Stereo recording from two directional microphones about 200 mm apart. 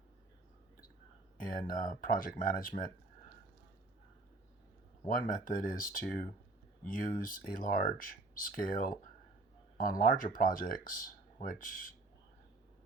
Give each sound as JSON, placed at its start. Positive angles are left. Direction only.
{"t": 1.4, "sound": "speech", "side_deg": 45}
{"t": 5.0, "sound": "speech", "side_deg": 40}